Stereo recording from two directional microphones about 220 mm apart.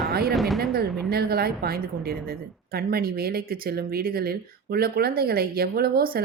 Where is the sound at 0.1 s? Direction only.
45° right (ahead or behind).